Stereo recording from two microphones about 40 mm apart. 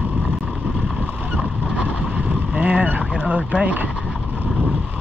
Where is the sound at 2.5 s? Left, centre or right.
Right.